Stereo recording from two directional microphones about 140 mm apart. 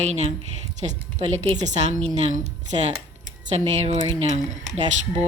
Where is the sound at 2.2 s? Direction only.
55° right (ahead or behind).